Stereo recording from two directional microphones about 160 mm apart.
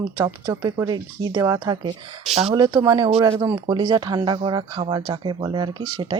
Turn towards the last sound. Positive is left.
turn(degrees=-25)  # may be behind; listen again after turning